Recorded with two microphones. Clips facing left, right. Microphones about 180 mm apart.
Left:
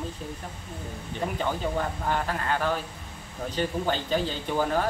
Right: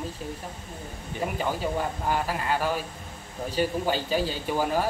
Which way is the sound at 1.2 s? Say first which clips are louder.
Even; 5° right (ahead or behind).